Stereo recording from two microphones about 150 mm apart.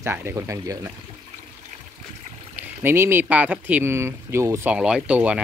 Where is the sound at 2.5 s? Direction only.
15° right (ahead or behind).